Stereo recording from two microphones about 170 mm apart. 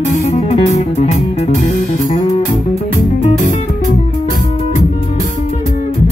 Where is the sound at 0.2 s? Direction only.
40° left (ahead or behind).